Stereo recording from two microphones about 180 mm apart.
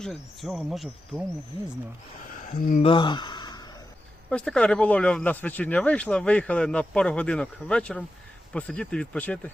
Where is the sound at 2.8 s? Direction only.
25° left (ahead or behind).